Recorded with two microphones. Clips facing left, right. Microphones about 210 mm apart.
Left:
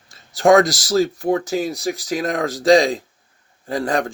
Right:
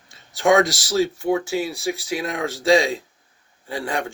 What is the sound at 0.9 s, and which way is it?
Speech, 40° left (ahead or behind).